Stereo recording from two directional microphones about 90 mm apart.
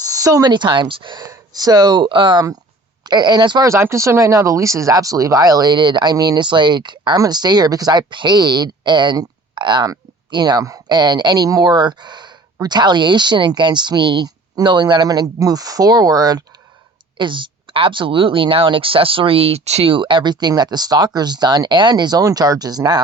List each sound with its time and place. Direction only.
0.1 s a sound: 40° right (ahead or behind)
0.5 s speech: 60° right (ahead or behind)
1.2 s speech: 45° right (ahead or behind); by 2.4 s 65° right (ahead or behind)
3.0 s speech: 50° right (ahead or behind)
3.6 s speech: 30° right (ahead or behind); by 9.9 s 60° right (ahead or behind)
10.3 s speech: 50° right (ahead or behind)
10.8 s speech: 55° right (ahead or behind)
17.2 s speech: 65° right (ahead or behind); by 23.0 s 45° right (ahead or behind)